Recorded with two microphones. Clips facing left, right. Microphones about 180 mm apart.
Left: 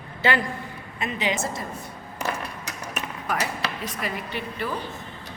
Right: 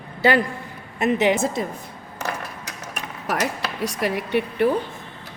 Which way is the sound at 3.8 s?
70° right (ahead or behind).